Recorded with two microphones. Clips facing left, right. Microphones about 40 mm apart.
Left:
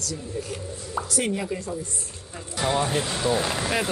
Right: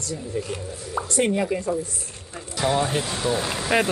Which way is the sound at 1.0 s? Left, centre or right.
Right.